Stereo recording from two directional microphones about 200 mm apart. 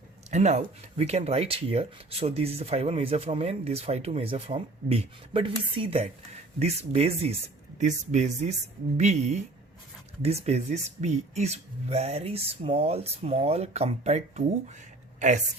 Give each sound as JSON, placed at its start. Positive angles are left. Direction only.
{"t": 0.3, "sound": "speech", "side_deg": -35}